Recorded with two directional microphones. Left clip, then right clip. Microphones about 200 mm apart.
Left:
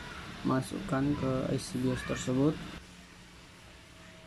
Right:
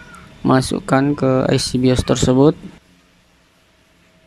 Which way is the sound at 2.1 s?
50° right (ahead or behind).